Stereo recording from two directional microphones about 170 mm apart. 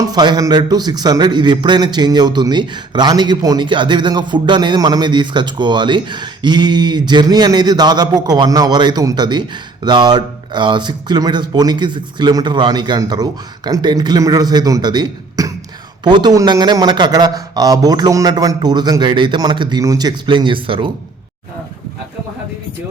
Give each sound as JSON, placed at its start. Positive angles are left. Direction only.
{"t": 0.0, "sound": "speech", "side_deg": -25}